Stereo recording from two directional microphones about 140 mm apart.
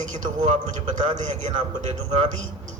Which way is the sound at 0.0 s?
65° right (ahead or behind).